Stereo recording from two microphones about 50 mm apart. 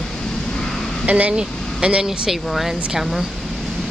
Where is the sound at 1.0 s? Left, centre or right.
Right.